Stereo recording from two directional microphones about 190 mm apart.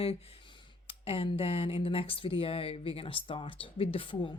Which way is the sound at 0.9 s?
30° left (ahead or behind).